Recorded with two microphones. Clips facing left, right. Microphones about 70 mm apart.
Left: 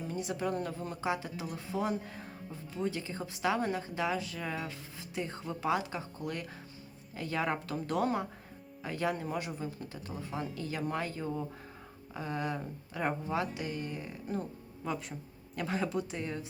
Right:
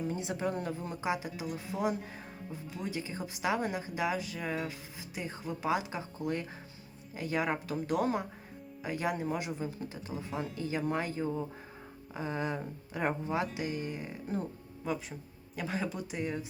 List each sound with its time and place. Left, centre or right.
0.1 s speech: right; by 5.8 s centre
5.9 s speech: right
14.8 s speech: centre
16.1 s speech: centre